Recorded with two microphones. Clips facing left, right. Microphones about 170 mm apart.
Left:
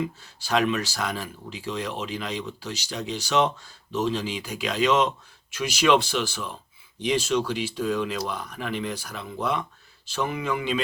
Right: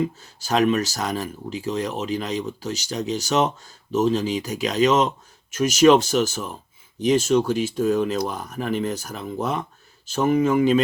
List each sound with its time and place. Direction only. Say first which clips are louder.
0.2 s speech: right 3 dB; 45° right (ahead or behind)